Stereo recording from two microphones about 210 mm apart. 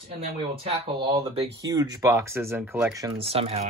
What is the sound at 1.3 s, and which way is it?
Speech, 25° right (ahead or behind).